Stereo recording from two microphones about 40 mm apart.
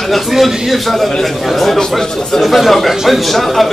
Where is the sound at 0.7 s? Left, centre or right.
Centre.